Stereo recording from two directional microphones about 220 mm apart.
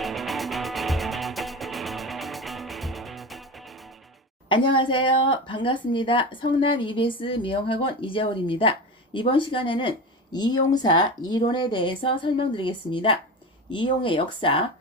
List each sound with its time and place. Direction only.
0.0 s music: centre (ahead or behind)
4.4 s a woman's voice: 20° left (ahead or behind)